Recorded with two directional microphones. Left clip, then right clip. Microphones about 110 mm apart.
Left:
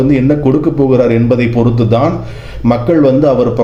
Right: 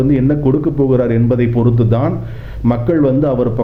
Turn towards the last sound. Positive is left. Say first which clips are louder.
# left 5 dB
turn(degrees=20)  # may be behind; listen again after turning